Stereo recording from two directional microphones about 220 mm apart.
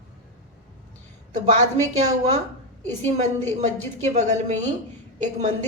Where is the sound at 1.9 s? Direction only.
30° right (ahead or behind).